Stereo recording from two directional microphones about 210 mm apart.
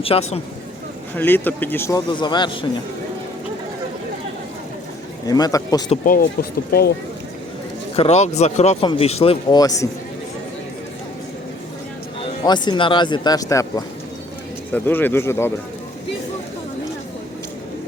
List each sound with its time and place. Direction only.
0.0 s speech: 30° left (ahead or behind)
1.1 s speech: 10° left (ahead or behind)
2.0 s speech: 20° left (ahead or behind)
5.2 s speech: 20° left (ahead or behind)
6.2 s speech: 45° left (ahead or behind)
7.9 s speech: 30° left (ahead or behind)
12.2 s speech: 20° left (ahead or behind)